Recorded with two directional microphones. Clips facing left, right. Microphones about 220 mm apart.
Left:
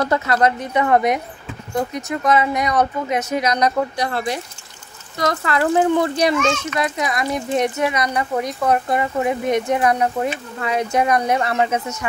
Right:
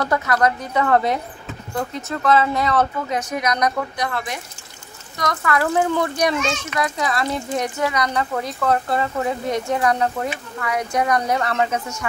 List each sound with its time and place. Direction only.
0.0 s speech: 25° left (ahead or behind)